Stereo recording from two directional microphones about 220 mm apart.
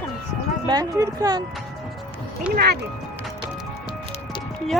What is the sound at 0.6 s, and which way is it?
Speech, 15° right (ahead or behind).